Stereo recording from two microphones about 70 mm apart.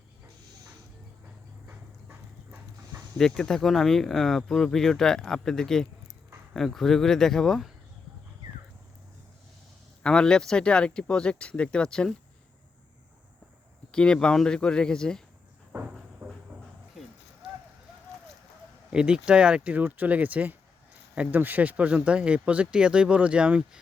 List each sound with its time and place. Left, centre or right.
1.6 s clip-clop: right
3.2 s speech: centre
10.0 s speech: centre
13.9 s speech: centre
15.7 s a sound: right
16.2 s a sound: right
18.9 s speech: centre